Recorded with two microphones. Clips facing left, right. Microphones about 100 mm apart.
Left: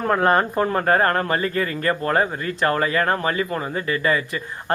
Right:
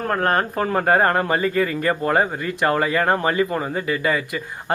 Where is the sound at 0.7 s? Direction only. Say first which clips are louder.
Right 4 dB; 5° right (ahead or behind).